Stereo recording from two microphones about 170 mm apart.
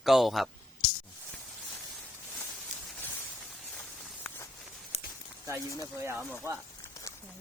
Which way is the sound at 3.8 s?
10° left (ahead or behind).